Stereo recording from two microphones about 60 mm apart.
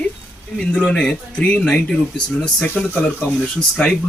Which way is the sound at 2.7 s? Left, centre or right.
Left.